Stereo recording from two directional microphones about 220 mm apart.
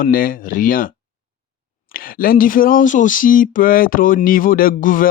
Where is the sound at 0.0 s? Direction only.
40° left (ahead or behind).